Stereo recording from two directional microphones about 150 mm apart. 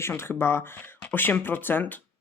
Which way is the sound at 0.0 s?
15° left (ahead or behind).